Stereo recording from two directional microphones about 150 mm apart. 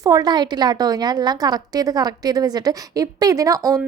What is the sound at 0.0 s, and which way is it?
A woman's voice, 25° right (ahead or behind).